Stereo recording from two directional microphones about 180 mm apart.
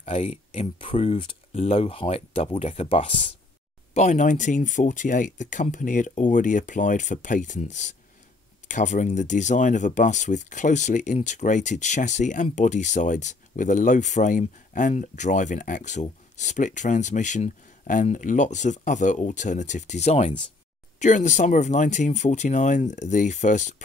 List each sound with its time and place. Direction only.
0.0 s speech: 35° left (ahead or behind)